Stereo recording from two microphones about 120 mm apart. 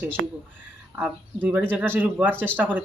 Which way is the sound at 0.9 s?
15° right (ahead or behind).